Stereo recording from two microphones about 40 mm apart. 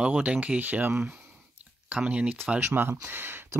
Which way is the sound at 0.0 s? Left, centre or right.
Right.